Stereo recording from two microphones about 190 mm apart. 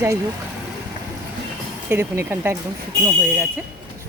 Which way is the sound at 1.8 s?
15° right (ahead or behind).